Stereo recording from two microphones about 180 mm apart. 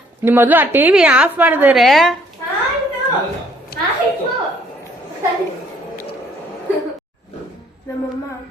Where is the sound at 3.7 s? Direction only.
60° left (ahead or behind).